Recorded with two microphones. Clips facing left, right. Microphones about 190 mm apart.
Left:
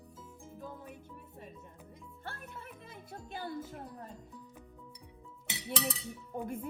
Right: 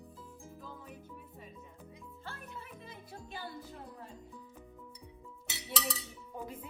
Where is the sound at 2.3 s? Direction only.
55° left (ahead or behind).